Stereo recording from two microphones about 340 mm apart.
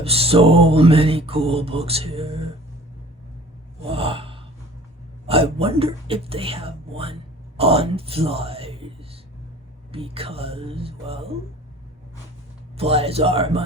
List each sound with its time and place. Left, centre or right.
0.0 s music: centre
3.8 s gasp: centre
5.2 s speech: centre
9.9 s music: centre
12.7 s music: centre